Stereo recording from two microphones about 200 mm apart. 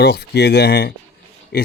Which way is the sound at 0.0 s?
55° left (ahead or behind).